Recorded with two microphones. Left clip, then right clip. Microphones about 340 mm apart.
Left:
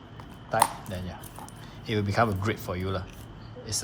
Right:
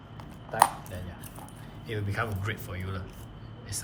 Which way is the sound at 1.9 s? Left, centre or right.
Centre.